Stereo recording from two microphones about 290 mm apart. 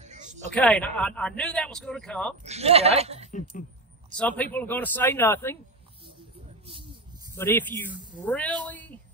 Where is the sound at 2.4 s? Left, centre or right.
Right.